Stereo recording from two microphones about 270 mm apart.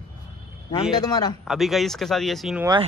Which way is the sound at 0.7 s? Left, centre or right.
Centre.